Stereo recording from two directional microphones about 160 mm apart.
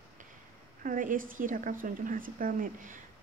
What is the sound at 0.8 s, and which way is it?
A woman's voice, 55° right (ahead or behind).